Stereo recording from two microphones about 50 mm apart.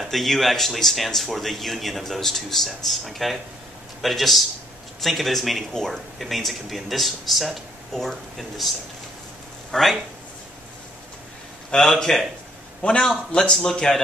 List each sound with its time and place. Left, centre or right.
0.0 s speech: centre
11.7 s a man's voice: centre